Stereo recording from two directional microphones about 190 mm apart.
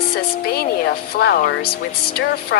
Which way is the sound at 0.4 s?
55° left (ahead or behind).